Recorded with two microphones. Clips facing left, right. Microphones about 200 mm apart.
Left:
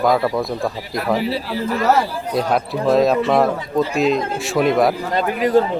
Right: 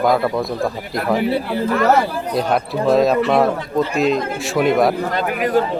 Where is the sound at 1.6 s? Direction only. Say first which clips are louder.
Right 2 dB; 55° right (ahead or behind).